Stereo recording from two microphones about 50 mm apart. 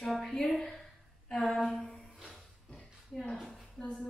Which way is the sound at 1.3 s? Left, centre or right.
Centre.